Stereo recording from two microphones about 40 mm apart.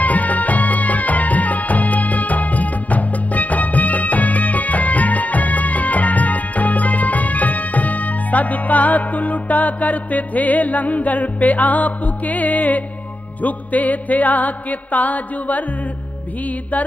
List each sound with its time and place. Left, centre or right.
0.0 s music: left